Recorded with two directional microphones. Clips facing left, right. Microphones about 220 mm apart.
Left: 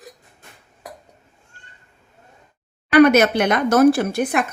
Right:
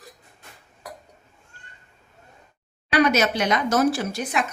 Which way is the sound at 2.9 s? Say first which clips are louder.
Left 8 dB; 55° left (ahead or behind).